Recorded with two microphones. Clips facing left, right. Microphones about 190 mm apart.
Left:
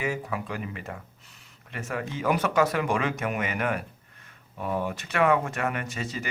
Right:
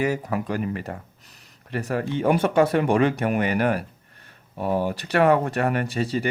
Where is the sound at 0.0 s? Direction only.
40° right (ahead or behind).